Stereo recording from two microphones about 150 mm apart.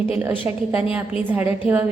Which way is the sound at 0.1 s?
10° right (ahead or behind).